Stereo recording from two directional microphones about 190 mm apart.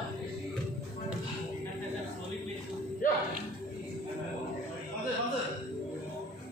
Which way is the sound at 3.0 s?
45° left (ahead or behind).